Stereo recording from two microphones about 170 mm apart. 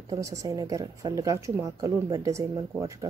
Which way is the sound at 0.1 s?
20° right (ahead or behind).